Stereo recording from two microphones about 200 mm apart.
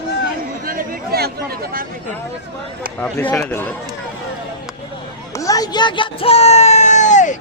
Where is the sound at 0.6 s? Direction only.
45° right (ahead or behind).